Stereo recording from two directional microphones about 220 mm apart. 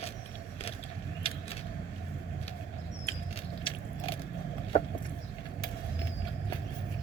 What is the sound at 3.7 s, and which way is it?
Gears, 25° left (ahead or behind).